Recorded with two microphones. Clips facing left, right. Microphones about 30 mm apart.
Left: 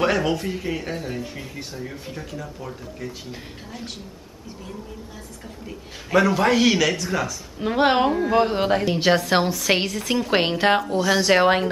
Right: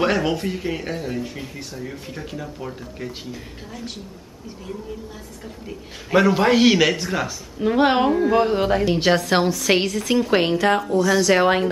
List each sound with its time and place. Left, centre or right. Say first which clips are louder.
0.0 s a woman's voice: right 1 dB; centre
6.1 s a man's voice: right 2 dB; centre
7.5 s a woman's voice: right 2 dB; centre
10.3 s a woman's voice: right 1 dB; centre
10.9 s speech: right 2 dB; left
11.3 s a woman's voice: even; centre